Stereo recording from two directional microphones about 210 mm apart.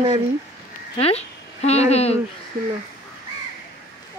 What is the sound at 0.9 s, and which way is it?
Speech, 30° left (ahead or behind).